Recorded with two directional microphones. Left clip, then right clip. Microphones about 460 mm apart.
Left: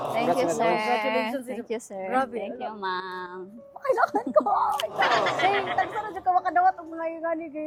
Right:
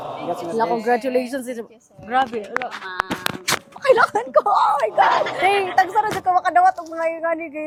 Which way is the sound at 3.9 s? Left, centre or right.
Right.